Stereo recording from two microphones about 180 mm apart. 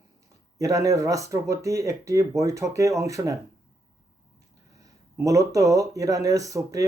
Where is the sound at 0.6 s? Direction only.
15° right (ahead or behind).